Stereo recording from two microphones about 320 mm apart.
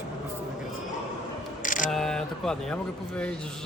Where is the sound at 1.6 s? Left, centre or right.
Left.